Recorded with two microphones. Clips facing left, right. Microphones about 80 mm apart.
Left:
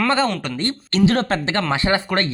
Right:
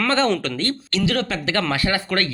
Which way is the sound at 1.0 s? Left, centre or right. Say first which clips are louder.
Left 6 dB; left.